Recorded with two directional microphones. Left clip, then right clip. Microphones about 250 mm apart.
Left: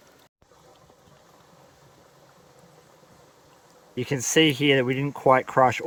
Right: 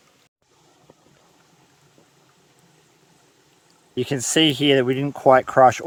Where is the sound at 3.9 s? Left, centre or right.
Right.